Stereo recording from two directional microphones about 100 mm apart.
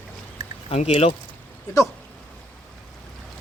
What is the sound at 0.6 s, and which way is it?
Speech, 90° left.